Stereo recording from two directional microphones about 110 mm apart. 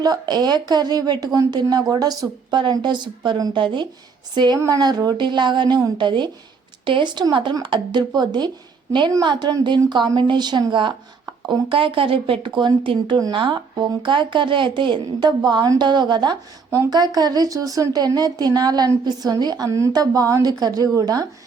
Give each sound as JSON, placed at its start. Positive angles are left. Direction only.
{"t": 0.0, "sound": "speech", "side_deg": -40}